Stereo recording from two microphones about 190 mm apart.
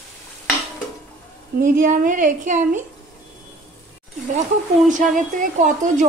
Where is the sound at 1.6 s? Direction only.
45° right (ahead or behind).